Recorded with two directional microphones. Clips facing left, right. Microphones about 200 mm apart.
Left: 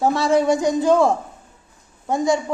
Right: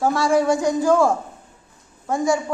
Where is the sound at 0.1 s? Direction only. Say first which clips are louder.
Left 1 dB; 20° left (ahead or behind).